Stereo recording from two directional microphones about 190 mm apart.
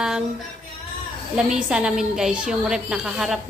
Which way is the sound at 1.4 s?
5° right (ahead or behind).